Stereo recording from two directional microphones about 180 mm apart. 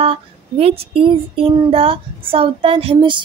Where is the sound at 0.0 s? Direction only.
30° right (ahead or behind).